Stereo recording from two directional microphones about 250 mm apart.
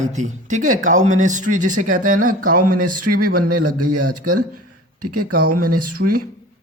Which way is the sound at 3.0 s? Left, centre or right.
Right.